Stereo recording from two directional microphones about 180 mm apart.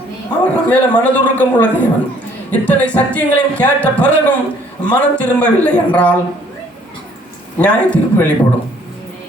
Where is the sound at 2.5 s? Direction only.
10° left (ahead or behind).